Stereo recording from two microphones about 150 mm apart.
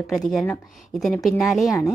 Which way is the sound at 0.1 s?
Centre (ahead or behind).